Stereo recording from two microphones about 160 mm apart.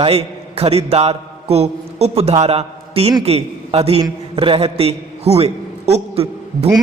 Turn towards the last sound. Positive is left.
turn(degrees=-40)  # may be behind; listen again after turning